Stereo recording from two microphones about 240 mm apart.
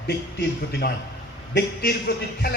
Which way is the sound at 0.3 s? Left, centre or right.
Left.